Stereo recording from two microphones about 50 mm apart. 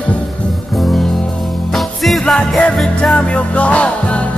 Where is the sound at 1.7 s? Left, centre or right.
Centre.